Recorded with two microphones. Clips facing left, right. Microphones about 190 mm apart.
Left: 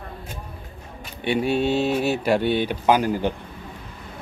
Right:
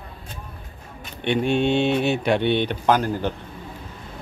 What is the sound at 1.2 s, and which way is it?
Speech, 5° left (ahead or behind).